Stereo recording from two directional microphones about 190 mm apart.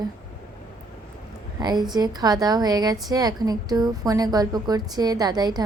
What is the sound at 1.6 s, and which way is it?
A woman's voice, 20° right (ahead or behind).